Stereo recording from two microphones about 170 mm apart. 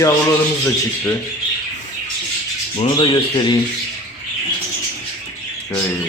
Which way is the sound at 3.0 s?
25° left (ahead or behind).